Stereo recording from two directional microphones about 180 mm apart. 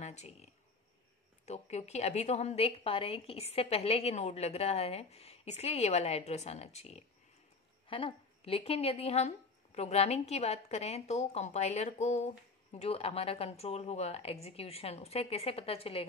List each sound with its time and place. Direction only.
0.0 s a woman's voice: 40° left (ahead or behind)